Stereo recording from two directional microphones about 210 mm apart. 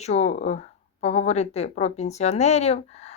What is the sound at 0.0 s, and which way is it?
Speech, 30° left (ahead or behind).